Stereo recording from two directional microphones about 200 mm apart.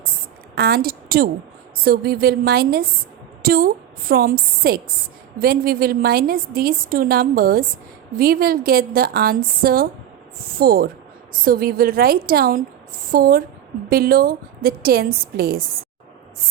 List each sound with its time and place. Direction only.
0.5 s a woman's voice: 50° right (ahead or behind)